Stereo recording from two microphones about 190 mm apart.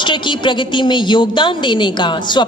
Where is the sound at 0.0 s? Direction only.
25° left (ahead or behind).